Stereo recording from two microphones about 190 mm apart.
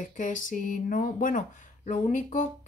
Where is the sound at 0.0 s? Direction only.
45° left (ahead or behind).